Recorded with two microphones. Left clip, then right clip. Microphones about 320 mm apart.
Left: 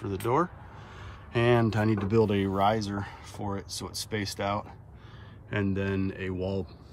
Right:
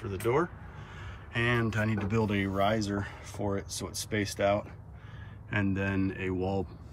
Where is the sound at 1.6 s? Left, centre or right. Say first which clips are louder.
Left 4 dB; centre.